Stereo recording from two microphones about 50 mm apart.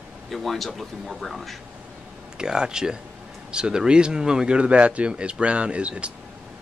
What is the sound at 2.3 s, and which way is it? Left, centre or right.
A man's voice, centre.